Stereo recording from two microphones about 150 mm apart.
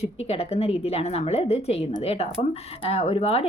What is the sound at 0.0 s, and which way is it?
A woman's voice, 45° left (ahead or behind).